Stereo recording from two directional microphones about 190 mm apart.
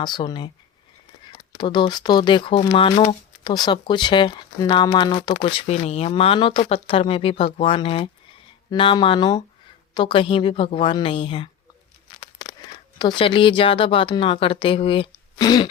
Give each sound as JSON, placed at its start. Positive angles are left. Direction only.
{"t": 0.0, "sound": "speech", "side_deg": 25}
{"t": 1.5, "sound": "speech", "side_deg": 25}
{"t": 13.0, "sound": "speech", "side_deg": 25}